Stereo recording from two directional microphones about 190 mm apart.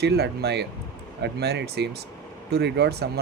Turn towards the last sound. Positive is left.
turn(degrees=-60)  # may be behind; listen again after turning